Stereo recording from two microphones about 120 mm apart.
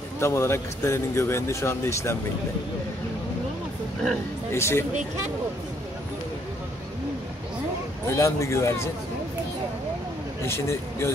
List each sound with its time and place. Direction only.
0.2 s speech: 20° left (ahead or behind)
4.5 s speech: 20° left (ahead or behind)
8.1 s speech: 25° left (ahead or behind)
10.4 s speech: 20° left (ahead or behind)